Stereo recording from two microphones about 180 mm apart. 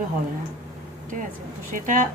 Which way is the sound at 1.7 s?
45° right (ahead or behind).